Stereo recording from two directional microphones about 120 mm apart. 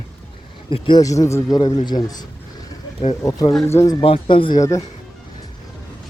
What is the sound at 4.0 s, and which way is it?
Speech, 45° left (ahead or behind).